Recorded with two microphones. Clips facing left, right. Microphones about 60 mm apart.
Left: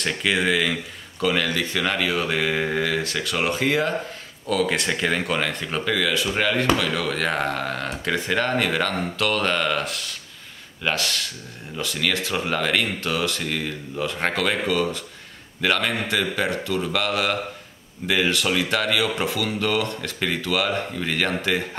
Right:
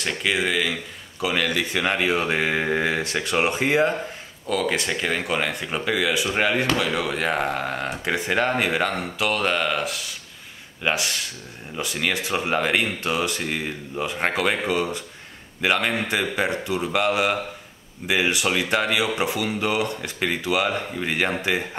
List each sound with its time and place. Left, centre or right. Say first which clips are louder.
0.0 s speech: left 1 dB; centre; by 2.6 s right
2.6 s speech: right 1 dB; centre
2.9 s speech: right 1 dB; right
4.5 s speech: left 1 dB; centre
10.8 s speech: even; centre